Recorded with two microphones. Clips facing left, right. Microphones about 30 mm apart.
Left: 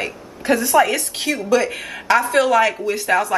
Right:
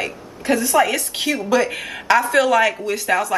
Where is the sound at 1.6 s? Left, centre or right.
Centre.